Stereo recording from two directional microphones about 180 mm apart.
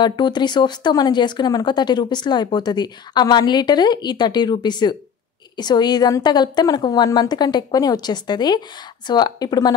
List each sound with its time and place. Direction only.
0.0 s speech: 25° left (ahead or behind)